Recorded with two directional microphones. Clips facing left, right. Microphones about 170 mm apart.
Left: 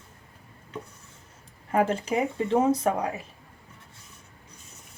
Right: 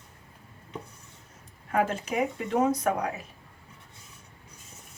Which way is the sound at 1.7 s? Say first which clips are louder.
Left 3 dB; 35° left (ahead or behind).